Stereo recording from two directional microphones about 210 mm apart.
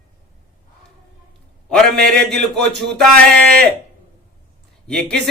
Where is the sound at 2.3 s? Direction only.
Centre (ahead or behind).